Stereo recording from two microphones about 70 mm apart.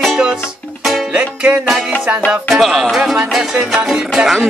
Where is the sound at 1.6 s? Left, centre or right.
Centre.